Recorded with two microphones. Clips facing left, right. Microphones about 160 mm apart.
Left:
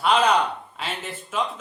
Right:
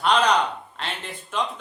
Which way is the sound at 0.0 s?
5° left (ahead or behind).